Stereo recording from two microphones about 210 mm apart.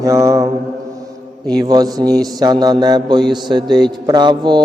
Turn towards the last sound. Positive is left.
turn(degrees=-20)  # may be behind; listen again after turning